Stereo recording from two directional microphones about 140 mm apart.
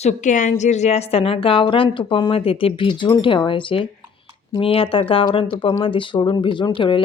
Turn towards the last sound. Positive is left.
turn(degrees=35)  # may be behind; listen again after turning